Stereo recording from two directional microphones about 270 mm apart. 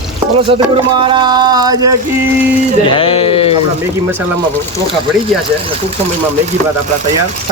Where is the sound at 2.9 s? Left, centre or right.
Centre.